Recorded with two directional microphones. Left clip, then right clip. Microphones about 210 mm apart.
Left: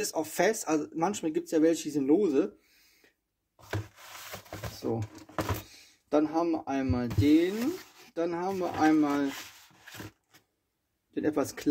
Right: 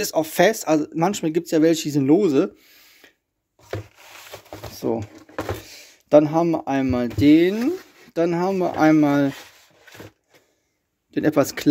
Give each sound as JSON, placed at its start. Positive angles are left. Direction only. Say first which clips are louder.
{"t": 0.0, "sound": "speech", "louder": "right 10 dB", "side_deg": -40}
{"t": 4.7, "sound": "speech", "louder": "right 9 dB", "side_deg": -45}
{"t": 11.1, "sound": "speech", "louder": "right 10 dB", "side_deg": -45}